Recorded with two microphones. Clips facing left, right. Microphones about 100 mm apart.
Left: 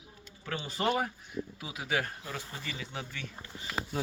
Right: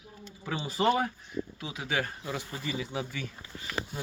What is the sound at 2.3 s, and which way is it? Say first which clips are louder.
Speech: right 5 dB; 15° right (ahead or behind).